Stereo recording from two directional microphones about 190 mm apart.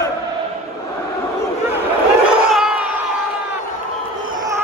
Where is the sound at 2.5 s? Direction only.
5° right (ahead or behind).